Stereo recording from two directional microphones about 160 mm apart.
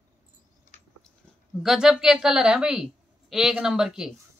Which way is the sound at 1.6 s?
5° right (ahead or behind).